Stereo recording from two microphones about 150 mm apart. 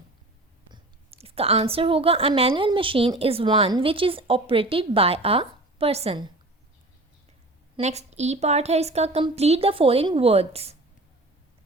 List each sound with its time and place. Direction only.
0.7 s a woman's voice: 40° right (ahead or behind)
7.8 s a woman's voice: 45° right (ahead or behind)